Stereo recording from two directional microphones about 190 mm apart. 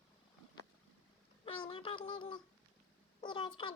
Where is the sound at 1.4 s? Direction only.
25° left (ahead or behind).